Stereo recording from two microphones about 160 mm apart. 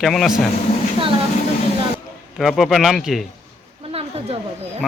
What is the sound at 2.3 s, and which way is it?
Speech, centre (ahead or behind).